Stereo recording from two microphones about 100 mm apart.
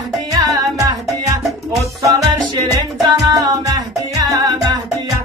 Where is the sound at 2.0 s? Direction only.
35° right (ahead or behind).